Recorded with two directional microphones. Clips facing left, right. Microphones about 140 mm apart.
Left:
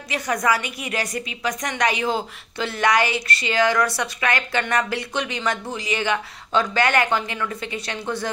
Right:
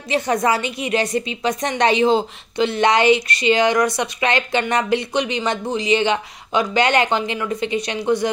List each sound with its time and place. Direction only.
0.1 s a woman's voice: 25° right (ahead or behind)